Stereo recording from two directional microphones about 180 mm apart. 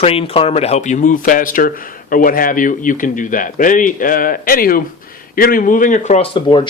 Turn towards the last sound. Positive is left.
turn(degrees=25)  # may be behind; listen again after turning